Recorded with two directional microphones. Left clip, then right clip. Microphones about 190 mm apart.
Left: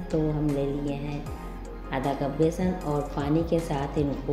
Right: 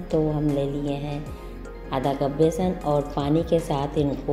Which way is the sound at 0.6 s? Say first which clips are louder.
Right 3 dB; 15° right (ahead or behind).